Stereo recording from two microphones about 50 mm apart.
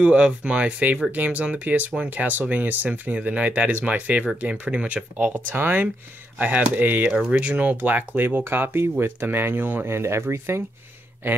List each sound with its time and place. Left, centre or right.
0.0 s speech: right
5.5 s speech: right
6.3 s speech: right
9.8 s speech: right
11.2 s speech: right